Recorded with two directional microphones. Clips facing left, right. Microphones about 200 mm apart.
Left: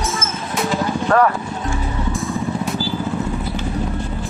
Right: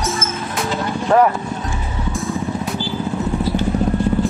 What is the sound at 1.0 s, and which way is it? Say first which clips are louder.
Speech: right 2 dB; 15° right (ahead or behind).